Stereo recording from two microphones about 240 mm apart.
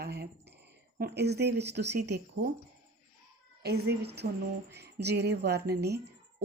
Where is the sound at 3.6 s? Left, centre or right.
Right.